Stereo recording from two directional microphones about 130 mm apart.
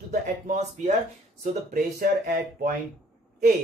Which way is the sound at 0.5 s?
60° right (ahead or behind).